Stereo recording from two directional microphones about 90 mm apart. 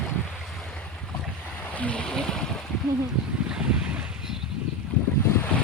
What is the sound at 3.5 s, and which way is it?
Boat, 10° right (ahead or behind).